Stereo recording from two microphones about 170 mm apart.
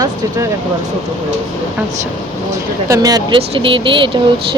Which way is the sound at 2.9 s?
20° right (ahead or behind).